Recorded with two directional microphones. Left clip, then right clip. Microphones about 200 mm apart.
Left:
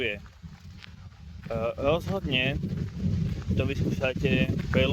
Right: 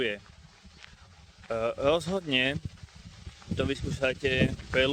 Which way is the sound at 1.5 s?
20° right (ahead or behind).